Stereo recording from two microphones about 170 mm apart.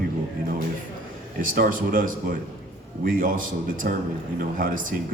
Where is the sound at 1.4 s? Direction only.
55° right (ahead or behind).